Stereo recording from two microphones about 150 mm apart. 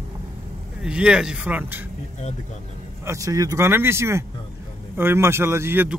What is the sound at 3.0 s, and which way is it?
A man's voice, 20° right (ahead or behind).